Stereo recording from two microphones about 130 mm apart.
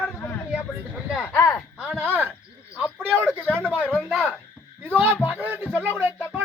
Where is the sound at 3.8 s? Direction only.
10° left (ahead or behind).